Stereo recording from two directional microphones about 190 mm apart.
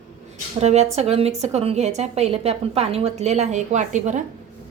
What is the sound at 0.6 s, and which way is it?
A woman's voice, 35° right (ahead or behind).